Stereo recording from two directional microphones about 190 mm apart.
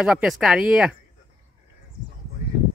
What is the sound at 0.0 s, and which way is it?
Speech, 5° right (ahead or behind).